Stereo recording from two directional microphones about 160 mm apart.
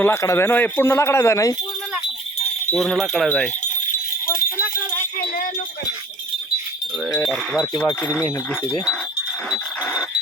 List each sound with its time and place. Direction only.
0.0 s speech: 20° left (ahead or behind)
2.7 s speech: centre (ahead or behind)
7.2 s speech: centre (ahead or behind)